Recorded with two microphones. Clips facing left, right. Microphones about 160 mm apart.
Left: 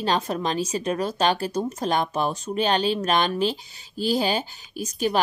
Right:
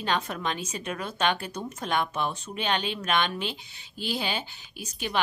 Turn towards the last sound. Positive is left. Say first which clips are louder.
# left 7 dB
turn(degrees=40)  # may be behind; listen again after turning